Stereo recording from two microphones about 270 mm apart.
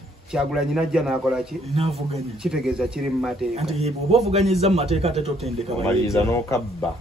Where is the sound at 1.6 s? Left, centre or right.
Right.